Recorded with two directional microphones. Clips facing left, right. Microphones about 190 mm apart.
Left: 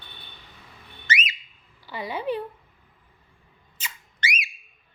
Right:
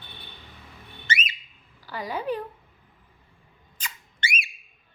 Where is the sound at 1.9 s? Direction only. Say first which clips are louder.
Even; 10° left (ahead or behind).